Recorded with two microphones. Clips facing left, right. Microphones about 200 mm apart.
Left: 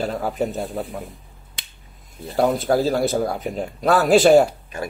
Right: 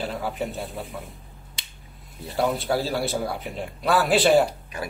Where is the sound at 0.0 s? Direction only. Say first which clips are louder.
Left 5 dB; 45° left (ahead or behind).